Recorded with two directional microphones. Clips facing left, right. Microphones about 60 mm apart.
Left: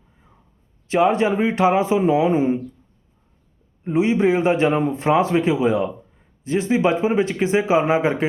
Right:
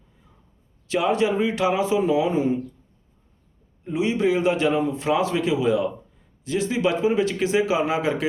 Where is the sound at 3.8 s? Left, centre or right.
Left.